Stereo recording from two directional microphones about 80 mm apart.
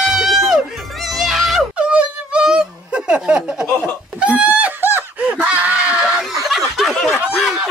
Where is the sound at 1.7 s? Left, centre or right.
Centre.